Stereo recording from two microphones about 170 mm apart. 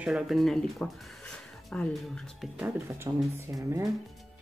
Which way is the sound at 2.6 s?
15° right (ahead or behind).